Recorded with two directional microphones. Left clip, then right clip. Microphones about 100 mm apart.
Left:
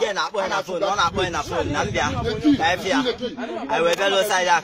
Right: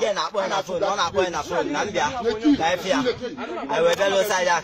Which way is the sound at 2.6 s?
35° left (ahead or behind).